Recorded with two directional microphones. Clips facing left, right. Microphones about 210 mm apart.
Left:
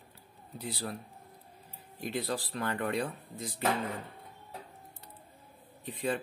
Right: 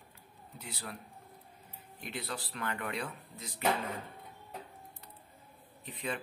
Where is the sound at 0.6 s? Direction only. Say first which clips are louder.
Left 7 dB; 35° left (ahead or behind).